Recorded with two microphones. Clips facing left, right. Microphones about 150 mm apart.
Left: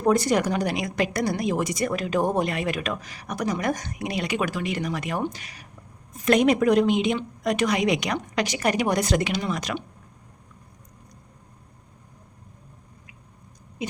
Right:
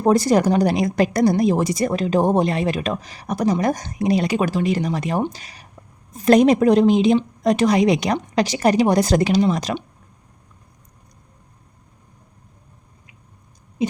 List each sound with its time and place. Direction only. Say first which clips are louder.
0.0 s a woman's voice: right 5 dB; 35° right (ahead or behind)